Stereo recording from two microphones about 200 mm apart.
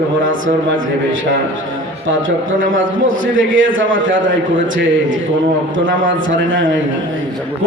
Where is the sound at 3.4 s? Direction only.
70° right (ahead or behind).